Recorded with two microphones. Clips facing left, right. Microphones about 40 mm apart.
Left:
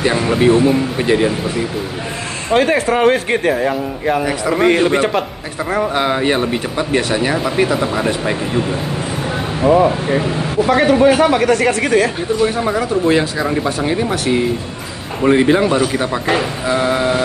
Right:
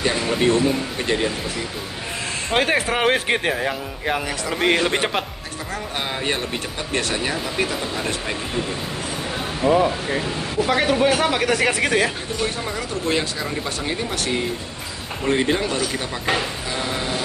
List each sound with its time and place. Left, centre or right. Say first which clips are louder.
0.0 s speech: left 6 dB; left
2.5 s speech: left 6 dB; centre
3.5 s speech: left 7 dB; centre
5.8 s a man's voice: left 12 dB; left
6.9 s speech: left 6 dB; centre
9.7 s a man's voice: left 6 dB; left
10.7 s speech: left 7 dB; centre
11.3 s speech: left 6 dB; centre
12.6 s speech: left 10 dB; left
13.7 s speech: left 8 dB; centre
15.2 s speech: left 8 dB; centre